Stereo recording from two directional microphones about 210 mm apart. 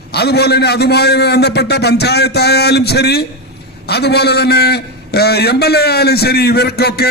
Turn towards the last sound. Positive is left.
turn(degrees=50)  # may be behind; listen again after turning